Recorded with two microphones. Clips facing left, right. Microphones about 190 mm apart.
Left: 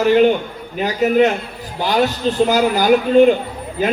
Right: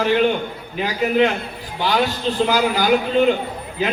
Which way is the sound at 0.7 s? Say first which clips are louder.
Left 4 dB; 45° left (ahead or behind).